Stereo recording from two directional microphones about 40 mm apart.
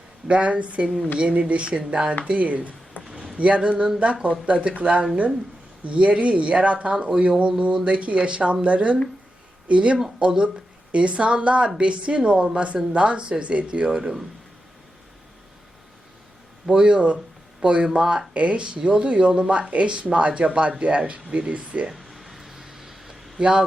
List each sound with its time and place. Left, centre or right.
0.3 s a woman's voice: right
2.2 s speech: right
3.0 s a sound: left
3.3 s a woman's voice: right
13.9 s speech: centre
16.6 s a woman's voice: right
21.9 s a sound: centre
23.4 s a woman's voice: centre